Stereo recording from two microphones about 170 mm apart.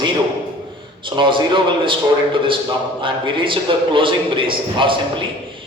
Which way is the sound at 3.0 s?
30° right (ahead or behind).